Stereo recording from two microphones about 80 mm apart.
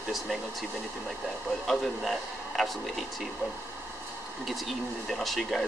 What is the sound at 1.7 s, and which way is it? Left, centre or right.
Speech, centre.